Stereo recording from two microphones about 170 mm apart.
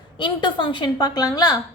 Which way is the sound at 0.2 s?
30° left (ahead or behind).